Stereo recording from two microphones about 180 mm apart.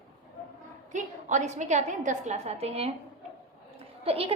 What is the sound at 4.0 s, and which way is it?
Speech, 30° right (ahead or behind).